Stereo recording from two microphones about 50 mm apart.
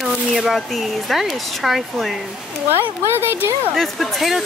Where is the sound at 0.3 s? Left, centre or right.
Centre.